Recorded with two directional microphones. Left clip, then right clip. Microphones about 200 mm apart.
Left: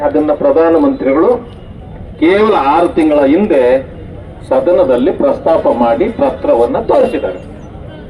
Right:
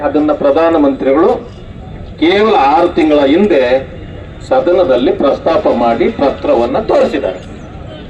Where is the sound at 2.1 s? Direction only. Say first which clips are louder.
Even; 50° left (ahead or behind).